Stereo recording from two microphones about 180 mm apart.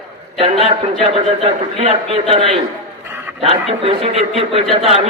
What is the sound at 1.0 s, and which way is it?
Speech, 35° right (ahead or behind).